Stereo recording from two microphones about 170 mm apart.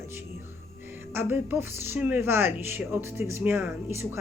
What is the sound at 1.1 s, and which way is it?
A woman's voice, 10° right (ahead or behind).